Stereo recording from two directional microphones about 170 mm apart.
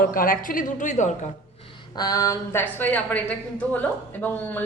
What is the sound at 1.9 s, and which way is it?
A man's voice, 20° left (ahead or behind).